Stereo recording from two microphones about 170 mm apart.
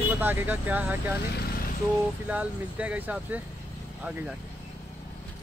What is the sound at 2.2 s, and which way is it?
Speech, 5° right (ahead or behind).